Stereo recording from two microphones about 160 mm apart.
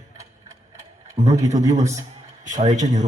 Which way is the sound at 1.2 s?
40° right (ahead or behind).